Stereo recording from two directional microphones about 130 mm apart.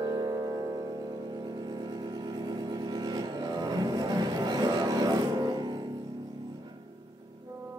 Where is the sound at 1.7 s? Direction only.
35° right (ahead or behind).